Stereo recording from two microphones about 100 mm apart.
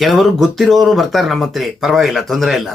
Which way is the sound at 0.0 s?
Centre (ahead or behind).